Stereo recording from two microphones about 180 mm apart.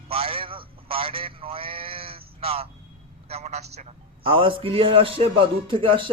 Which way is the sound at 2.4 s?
35° right (ahead or behind).